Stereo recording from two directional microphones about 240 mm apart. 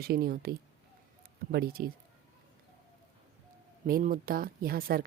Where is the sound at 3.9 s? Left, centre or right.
Right.